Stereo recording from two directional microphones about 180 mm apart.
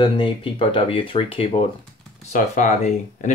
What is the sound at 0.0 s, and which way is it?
Speech, 25° left (ahead or behind).